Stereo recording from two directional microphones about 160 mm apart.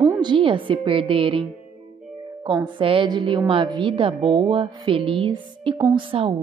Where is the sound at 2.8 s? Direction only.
35° right (ahead or behind).